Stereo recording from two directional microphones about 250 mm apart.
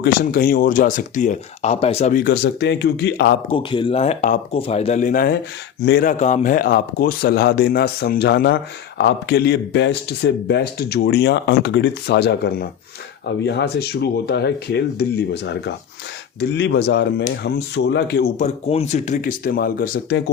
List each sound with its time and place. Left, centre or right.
0.0 s speech: left
3.5 s speech: centre; by 20.3 s left